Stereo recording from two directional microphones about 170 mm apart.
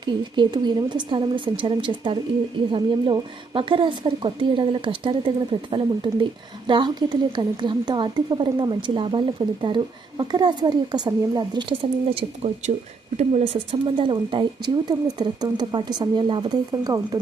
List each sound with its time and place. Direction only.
0.0 s a woman's voice: 25° right (ahead or behind)